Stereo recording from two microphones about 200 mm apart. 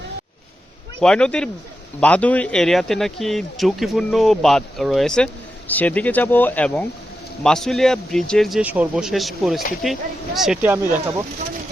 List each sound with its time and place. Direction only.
1.0 s speech: 5° left (ahead or behind)